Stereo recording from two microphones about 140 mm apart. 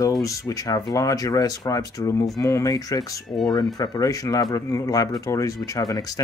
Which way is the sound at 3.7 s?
25° left (ahead or behind).